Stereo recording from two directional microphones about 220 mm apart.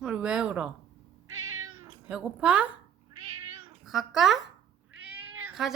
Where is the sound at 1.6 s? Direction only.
20° right (ahead or behind).